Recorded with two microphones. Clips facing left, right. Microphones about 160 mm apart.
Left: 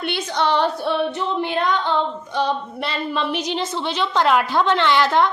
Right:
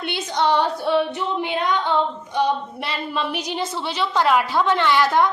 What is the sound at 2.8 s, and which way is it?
A woman's voice, 10° right (ahead or behind).